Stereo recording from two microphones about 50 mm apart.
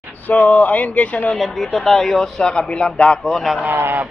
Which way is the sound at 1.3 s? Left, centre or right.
Centre.